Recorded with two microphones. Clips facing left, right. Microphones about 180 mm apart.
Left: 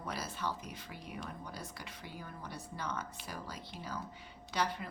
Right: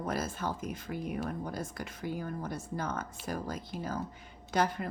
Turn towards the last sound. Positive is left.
turn(degrees=-45)  # may be behind; listen again after turning